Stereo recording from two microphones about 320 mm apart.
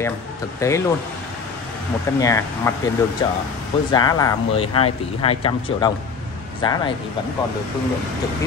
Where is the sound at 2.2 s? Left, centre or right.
Centre.